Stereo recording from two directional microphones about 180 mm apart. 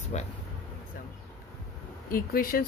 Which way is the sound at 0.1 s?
40° left (ahead or behind).